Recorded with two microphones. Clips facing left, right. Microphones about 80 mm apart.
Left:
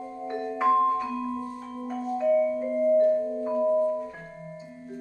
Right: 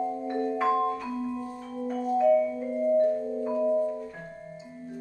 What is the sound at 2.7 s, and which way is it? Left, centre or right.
Music, left.